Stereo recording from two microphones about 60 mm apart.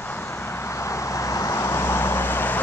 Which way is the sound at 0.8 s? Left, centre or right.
Left.